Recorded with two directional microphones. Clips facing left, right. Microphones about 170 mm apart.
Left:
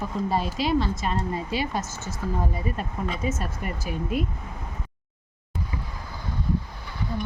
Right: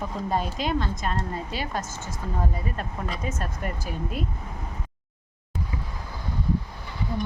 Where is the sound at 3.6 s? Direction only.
40° right (ahead or behind).